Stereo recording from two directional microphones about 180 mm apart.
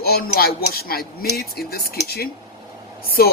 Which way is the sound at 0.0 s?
55° left (ahead or behind).